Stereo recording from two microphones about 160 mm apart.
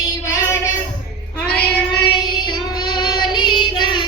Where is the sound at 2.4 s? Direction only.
30° left (ahead or behind).